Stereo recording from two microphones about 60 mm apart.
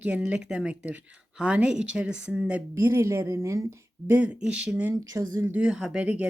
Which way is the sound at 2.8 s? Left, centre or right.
Right.